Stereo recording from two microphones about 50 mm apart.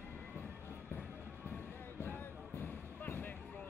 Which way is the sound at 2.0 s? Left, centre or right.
Left.